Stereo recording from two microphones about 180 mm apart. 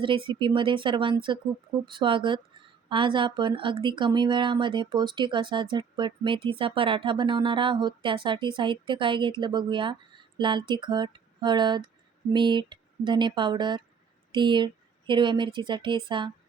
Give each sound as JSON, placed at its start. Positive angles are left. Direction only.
{"t": 0.0, "sound": "speech", "side_deg": -30}